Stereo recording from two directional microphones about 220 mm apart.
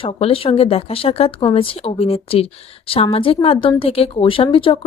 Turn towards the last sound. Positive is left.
turn(degrees=25)  # may be behind; listen again after turning